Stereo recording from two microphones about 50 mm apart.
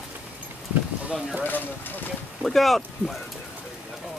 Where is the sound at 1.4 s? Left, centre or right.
Left.